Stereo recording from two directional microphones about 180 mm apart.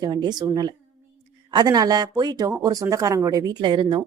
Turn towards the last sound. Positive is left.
turn(degrees=-25)  # may be behind; listen again after turning